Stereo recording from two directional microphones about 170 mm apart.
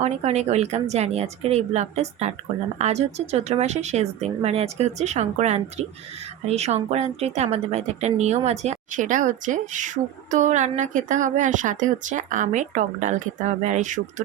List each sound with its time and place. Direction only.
0.0 s a woman's voice: 40° right (ahead or behind)